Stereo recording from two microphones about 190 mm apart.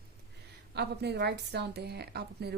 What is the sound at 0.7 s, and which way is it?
Speech, 60° right (ahead or behind).